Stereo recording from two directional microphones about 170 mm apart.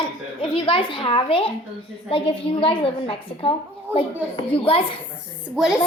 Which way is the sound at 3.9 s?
10° right (ahead or behind).